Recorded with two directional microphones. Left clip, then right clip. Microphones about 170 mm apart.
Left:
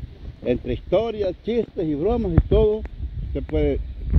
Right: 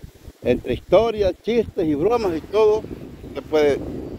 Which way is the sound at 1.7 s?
45° right (ahead or behind).